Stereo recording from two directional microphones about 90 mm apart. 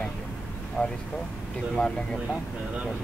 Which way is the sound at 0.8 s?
15° left (ahead or behind).